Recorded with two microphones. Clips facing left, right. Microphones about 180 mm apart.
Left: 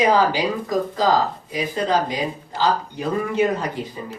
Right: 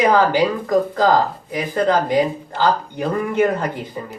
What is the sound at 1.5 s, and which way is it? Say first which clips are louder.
Speech: right 4 dB; 55° right (ahead or behind).